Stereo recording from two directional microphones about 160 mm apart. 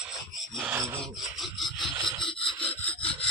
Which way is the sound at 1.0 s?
Centre (ahead or behind).